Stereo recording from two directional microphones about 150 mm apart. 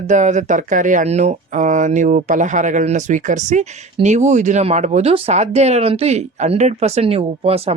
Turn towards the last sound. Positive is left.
turn(degrees=-40)  # may be behind; listen again after turning